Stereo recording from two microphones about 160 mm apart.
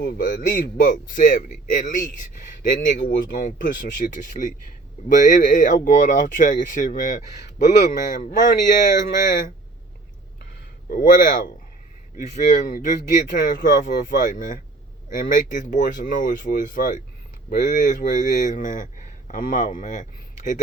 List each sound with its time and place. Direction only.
0.0 s a man's voice: 60° left (ahead or behind)
3.0 s a man's voice: 70° left (ahead or behind)
10.8 s a man's voice: 60° left (ahead or behind)